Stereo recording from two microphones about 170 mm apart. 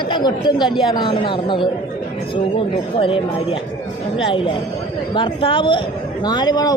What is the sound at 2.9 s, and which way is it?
Speech, 30° left (ahead or behind).